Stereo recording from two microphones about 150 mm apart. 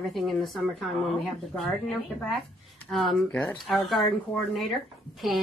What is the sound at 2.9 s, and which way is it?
A woman's voice, centre (ahead or behind).